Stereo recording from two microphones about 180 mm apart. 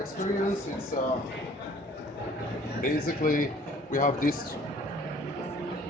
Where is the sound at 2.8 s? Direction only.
50° left (ahead or behind).